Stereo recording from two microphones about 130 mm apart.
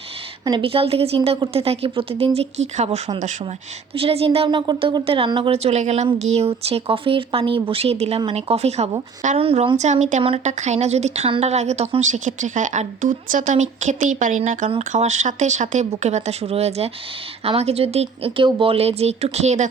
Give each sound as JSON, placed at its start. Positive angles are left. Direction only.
{"t": 0.6, "sound": "a woman's voice", "side_deg": -45}
{"t": 9.4, "sound": "a woman's voice", "side_deg": -45}
{"t": 9.7, "sound": "a woman's voice", "side_deg": -65}
{"t": 14.7, "sound": "a woman's voice", "side_deg": -60}